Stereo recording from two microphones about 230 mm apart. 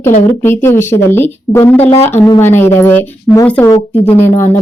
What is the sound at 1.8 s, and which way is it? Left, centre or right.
Speech, left.